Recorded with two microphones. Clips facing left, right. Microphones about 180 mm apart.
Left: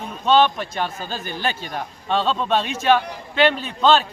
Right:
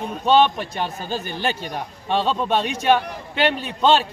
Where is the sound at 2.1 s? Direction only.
15° right (ahead or behind).